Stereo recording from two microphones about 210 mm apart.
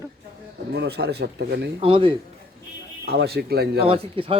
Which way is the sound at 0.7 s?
50° right (ahead or behind).